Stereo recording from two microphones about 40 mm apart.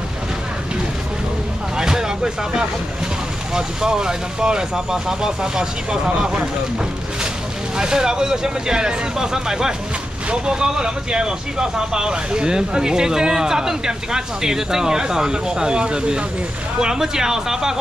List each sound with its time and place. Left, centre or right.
1.8 s vehicle: centre
3.5 s speech: centre
7.7 s speech: centre